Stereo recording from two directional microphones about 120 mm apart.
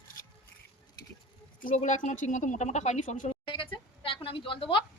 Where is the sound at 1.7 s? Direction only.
90° left.